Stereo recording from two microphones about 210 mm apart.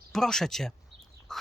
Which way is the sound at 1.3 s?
Centre (ahead or behind).